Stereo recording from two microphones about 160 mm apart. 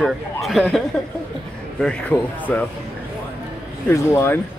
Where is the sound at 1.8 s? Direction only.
10° left (ahead or behind).